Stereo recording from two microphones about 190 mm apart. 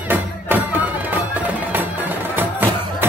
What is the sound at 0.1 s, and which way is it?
Music, 10° right (ahead or behind).